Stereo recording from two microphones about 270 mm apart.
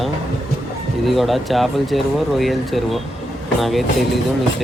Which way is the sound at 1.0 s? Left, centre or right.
Centre.